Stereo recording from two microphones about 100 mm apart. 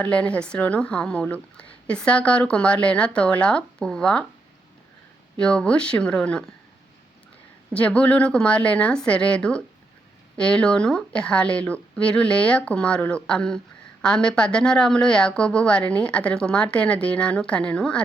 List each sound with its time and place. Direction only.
0.0 s a woman's voice: 10° left (ahead or behind)
5.4 s a woman's voice: 10° left (ahead or behind)
7.7 s a woman's voice: 10° left (ahead or behind)